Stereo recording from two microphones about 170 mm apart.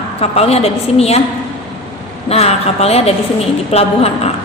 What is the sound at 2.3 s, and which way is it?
A woman's voice, 35° left (ahead or behind).